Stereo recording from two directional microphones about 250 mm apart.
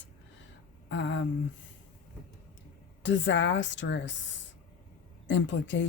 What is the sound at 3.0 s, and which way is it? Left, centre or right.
Speech, left.